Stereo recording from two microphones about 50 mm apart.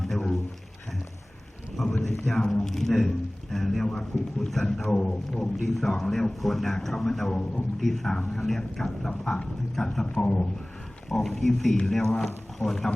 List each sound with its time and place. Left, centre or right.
0.0 s a sound: centre
1.7 s thunder: centre
2.1 s a man's voice: centre
4.9 s a man's voice: centre
5.6 s a man's voice: centre
10.1 s speech: centre
11.1 s a man's voice: centre